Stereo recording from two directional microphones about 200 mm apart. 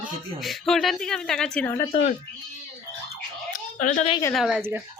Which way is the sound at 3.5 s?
40° left (ahead or behind).